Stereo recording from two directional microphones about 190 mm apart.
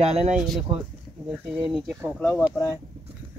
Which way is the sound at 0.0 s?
35° right (ahead or behind).